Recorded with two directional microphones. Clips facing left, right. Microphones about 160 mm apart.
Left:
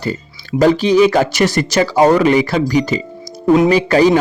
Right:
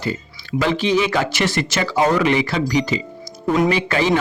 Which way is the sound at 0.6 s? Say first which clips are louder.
Left 8 dB; 40° left (ahead or behind).